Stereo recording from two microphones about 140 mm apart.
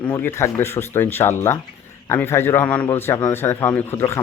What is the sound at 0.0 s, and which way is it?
Speech, 15° left (ahead or behind).